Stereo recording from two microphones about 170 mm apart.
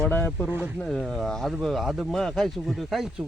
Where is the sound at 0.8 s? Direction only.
Centre (ahead or behind).